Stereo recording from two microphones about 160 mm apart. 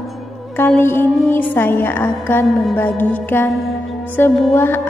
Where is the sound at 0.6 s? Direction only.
15° left (ahead or behind).